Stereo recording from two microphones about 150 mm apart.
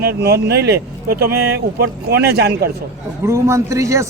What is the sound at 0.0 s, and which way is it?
Speech, 90° right.